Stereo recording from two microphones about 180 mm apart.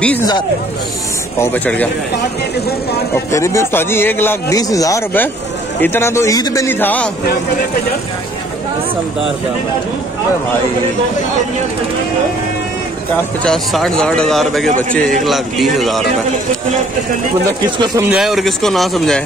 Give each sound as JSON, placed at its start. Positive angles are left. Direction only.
{"t": 1.4, "sound": "a man's voice", "side_deg": 10}
{"t": 3.3, "sound": "a man's voice", "side_deg": 15}
{"t": 13.4, "sound": "speech", "side_deg": 5}
{"t": 17.6, "sound": "speech", "side_deg": -25}
{"t": 18.1, "sound": "speech", "side_deg": 0}